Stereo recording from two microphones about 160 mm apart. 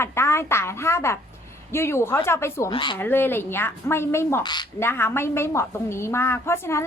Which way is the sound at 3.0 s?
15° left (ahead or behind).